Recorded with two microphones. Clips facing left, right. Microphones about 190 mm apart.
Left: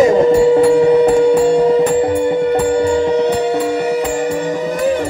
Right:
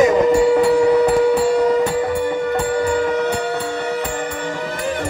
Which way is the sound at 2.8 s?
25° left (ahead or behind).